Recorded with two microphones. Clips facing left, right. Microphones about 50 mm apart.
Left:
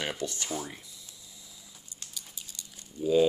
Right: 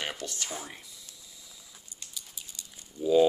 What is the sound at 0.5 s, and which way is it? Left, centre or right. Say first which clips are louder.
Speech: left 4 dB; centre.